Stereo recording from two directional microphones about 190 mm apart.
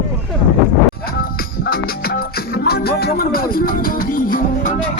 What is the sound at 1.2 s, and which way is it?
Music, 50° left (ahead or behind).